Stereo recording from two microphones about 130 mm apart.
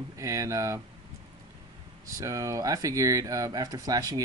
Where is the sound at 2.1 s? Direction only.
25° right (ahead or behind).